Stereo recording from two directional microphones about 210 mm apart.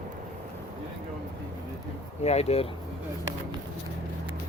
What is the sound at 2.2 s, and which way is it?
Speech, 30° left (ahead or behind).